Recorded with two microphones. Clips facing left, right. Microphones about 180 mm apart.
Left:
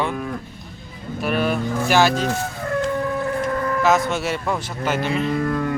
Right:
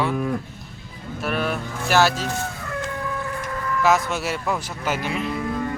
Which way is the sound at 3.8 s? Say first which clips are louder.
Even; 5° right (ahead or behind).